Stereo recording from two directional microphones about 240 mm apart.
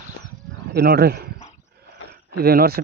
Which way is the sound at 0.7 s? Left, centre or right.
Right.